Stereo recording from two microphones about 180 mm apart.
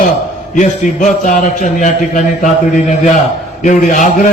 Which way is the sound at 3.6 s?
45° left (ahead or behind).